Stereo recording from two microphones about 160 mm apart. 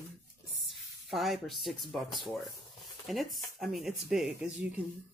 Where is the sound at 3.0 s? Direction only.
Centre (ahead or behind).